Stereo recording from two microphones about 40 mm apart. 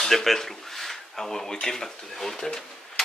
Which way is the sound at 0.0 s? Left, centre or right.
Centre.